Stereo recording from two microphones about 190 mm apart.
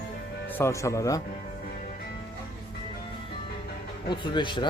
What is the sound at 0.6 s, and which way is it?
Speech, 15° left (ahead or behind).